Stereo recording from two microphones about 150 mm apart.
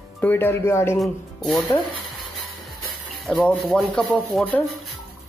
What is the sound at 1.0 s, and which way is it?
Speech, centre (ahead or behind).